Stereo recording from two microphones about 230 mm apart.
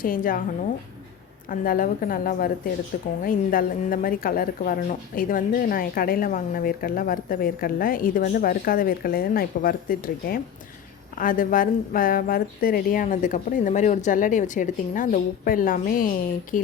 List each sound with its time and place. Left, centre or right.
0.0 s a woman's voice: left
1.5 s a woman's voice: left